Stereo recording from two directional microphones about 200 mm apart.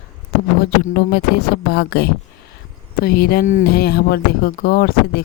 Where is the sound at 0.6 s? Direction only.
50° left (ahead or behind).